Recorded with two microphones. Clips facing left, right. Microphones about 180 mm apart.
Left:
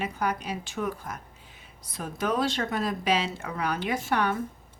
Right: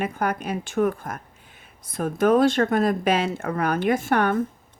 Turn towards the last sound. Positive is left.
turn(degrees=-50)  # may be behind; listen again after turning